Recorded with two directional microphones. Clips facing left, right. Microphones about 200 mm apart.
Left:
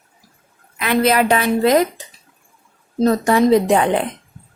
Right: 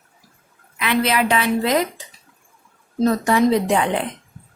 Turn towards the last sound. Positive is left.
turn(degrees=45)  # may be behind; listen again after turning